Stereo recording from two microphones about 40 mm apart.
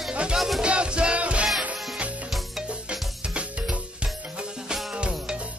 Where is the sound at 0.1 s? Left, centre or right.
Right.